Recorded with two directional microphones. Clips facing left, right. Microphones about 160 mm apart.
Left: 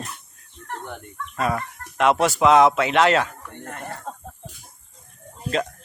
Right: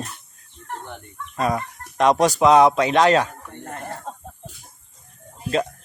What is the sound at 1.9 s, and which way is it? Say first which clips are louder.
Speech: right 2 dB; 35° right (ahead or behind).